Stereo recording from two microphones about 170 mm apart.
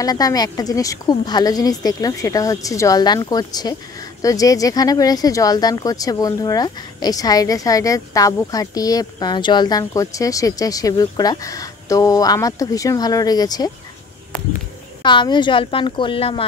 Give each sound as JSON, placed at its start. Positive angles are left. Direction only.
{"t": 0.0, "sound": "speech", "side_deg": 20}
{"t": 15.0, "sound": "speech", "side_deg": 25}